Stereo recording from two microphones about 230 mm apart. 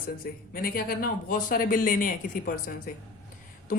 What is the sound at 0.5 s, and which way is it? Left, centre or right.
A woman's voice, left.